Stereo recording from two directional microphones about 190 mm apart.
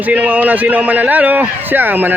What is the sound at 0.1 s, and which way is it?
A man's voice, 10° right (ahead or behind).